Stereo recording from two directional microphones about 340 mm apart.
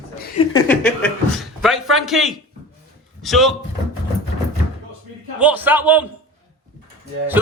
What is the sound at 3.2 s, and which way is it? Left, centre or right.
Speech, centre.